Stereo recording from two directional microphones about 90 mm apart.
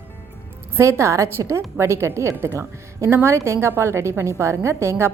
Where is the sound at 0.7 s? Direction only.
30° right (ahead or behind).